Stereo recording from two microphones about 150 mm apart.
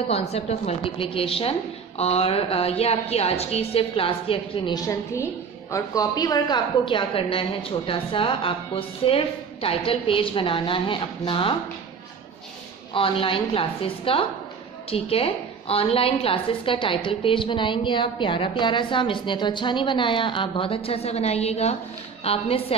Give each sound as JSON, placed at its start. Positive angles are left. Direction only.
{"t": 0.1, "sound": "a woman's voice", "side_deg": 45}
{"t": 4.7, "sound": "a woman's voice", "side_deg": 20}
{"t": 12.9, "sound": "a woman's voice", "side_deg": 35}